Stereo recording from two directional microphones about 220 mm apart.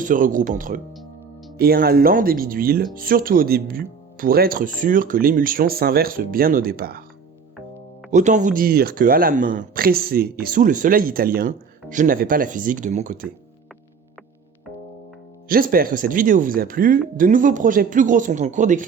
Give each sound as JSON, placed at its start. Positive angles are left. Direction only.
{"t": 0.0, "sound": "speech", "side_deg": -35}
{"t": 8.1, "sound": "speech", "side_deg": -35}
{"t": 15.4, "sound": "speech", "side_deg": -40}